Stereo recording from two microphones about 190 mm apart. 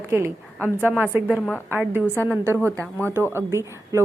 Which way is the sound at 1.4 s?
5° left (ahead or behind).